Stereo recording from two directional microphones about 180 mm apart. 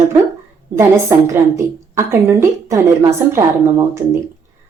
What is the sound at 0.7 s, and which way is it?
A woman's voice, 15° right (ahead or behind).